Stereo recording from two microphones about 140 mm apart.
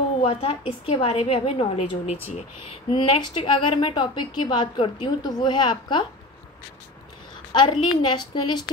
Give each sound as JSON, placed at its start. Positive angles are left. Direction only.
{"t": 0.2, "sound": "a woman's voice", "side_deg": 40}
{"t": 2.9, "sound": "a woman's voice", "side_deg": 35}
{"t": 7.5, "sound": "a woman's voice", "side_deg": 35}